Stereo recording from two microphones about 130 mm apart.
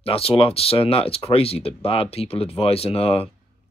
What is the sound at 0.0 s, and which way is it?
Speech, 45° left (ahead or behind).